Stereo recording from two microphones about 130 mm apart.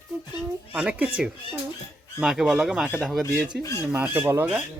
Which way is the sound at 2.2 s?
5° right (ahead or behind).